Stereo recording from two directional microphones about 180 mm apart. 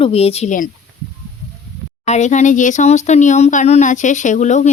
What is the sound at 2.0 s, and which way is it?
Speech, 40° left (ahead or behind).